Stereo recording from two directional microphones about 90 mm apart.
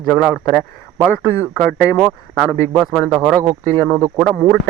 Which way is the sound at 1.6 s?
15° left (ahead or behind).